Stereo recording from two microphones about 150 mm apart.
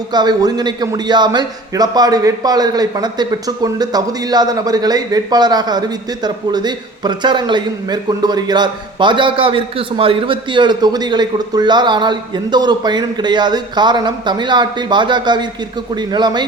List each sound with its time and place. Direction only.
0.1 s a man's voice: 30° right (ahead or behind)